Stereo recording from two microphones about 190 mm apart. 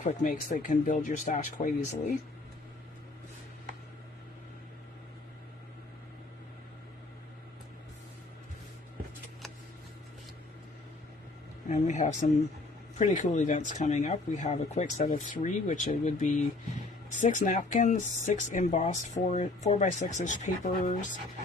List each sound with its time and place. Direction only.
0.0 s speech: 45° left (ahead or behind)
11.7 s speech: 40° left (ahead or behind)